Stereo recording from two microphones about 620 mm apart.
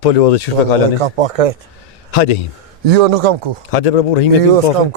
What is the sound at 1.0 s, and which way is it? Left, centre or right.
Speech, right.